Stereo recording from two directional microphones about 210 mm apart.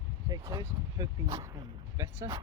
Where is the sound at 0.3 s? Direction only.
20° right (ahead or behind).